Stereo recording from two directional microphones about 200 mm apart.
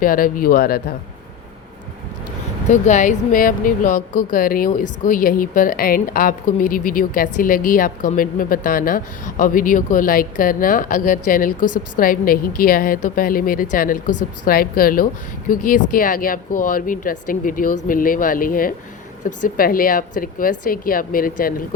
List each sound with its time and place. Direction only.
0.0 s speech: 45° left (ahead or behind)
2.6 s speech: 35° left (ahead or behind)